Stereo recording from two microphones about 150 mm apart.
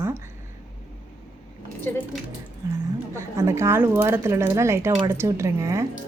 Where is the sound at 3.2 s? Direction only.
20° right (ahead or behind).